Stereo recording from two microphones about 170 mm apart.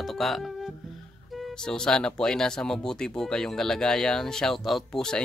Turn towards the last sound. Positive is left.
turn(degrees=5)  # may be behind; listen again after turning